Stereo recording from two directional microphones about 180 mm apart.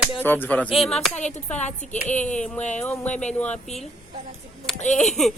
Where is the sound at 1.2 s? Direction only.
40° left (ahead or behind).